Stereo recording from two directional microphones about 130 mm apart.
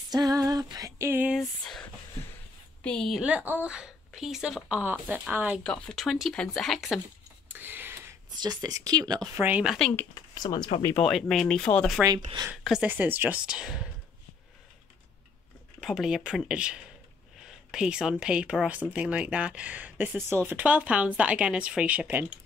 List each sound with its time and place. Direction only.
0.1 s female singing: 30° right (ahead or behind)
1.3 s a woman's voice: centre (ahead or behind)
5.6 s a woman's voice: 5° left (ahead or behind)
7.4 s a sound: 15° right (ahead or behind)
8.4 s speech: 30° right (ahead or behind)
9.4 s speech: 10° right (ahead or behind)
10.3 s speech: 30° left (ahead or behind)
11.0 s a woman's voice: centre (ahead or behind)
12.6 s a woman's voice: 10° right (ahead or behind)
15.8 s a woman's voice: 5° right (ahead or behind)